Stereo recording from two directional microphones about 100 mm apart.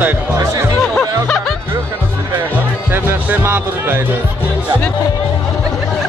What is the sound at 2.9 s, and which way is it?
Music, 15° right (ahead or behind).